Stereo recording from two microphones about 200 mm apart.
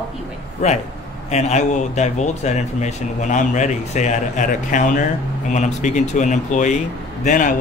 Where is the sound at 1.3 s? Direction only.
35° left (ahead or behind).